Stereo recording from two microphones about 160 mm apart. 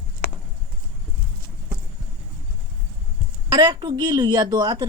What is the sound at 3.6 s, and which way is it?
Speech, 25° right (ahead or behind).